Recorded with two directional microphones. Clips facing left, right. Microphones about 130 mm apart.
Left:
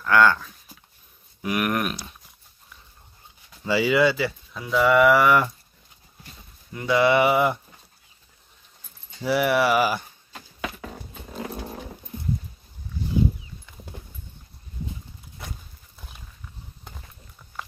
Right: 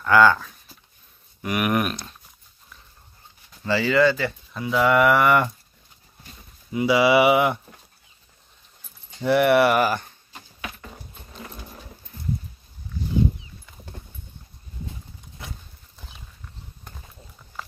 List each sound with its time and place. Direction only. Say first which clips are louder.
0.0 s speech: right 2 dB; centre (ahead or behind)
3.6 s speech: right 1 dB; 10° left (ahead or behind)
4.6 s speech: even; centre (ahead or behind)
6.7 s speech: right 2 dB; 10° right (ahead or behind)
9.2 s speech: right 4 dB; centre (ahead or behind)
10.3 s a sound: left 4 dB; 80° left
11.3 s dog: left 8 dB; 70° left (ahead or behind)